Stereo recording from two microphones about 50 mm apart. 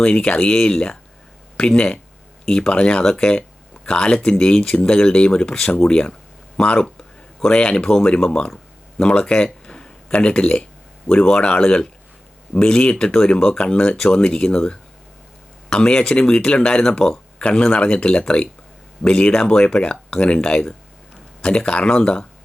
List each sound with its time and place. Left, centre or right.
0.0 s speech: left